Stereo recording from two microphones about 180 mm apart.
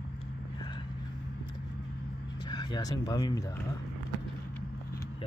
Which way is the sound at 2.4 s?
25° left (ahead or behind).